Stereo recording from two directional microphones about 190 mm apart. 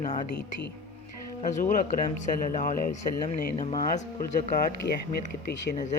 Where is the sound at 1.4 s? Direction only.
40° left (ahead or behind).